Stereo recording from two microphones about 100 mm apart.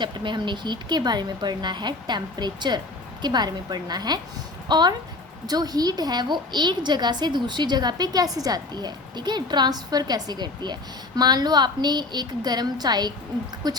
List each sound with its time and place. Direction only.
0.0 s a woman's voice: 50° right (ahead or behind)